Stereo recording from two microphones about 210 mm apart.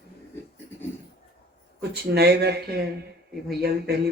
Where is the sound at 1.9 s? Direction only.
50° right (ahead or behind).